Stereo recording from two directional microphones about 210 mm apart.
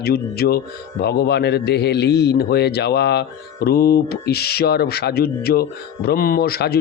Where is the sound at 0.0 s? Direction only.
45° left (ahead or behind).